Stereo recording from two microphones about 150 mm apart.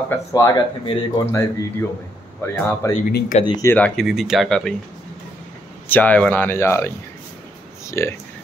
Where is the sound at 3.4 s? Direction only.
25° left (ahead or behind).